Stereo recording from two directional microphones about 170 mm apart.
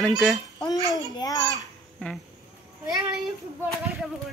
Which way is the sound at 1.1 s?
25° left (ahead or behind).